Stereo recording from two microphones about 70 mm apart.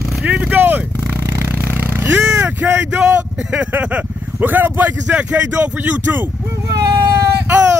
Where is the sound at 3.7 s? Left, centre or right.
Right.